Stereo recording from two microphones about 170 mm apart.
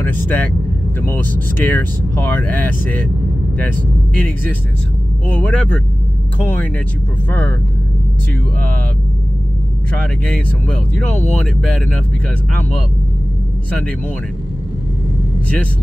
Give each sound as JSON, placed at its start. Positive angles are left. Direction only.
{"t": 0.0, "sound": "speech", "side_deg": 10}
{"t": 5.3, "sound": "speech", "side_deg": 10}
{"t": 7.2, "sound": "speech", "side_deg": 10}
{"t": 10.2, "sound": "speech", "side_deg": 5}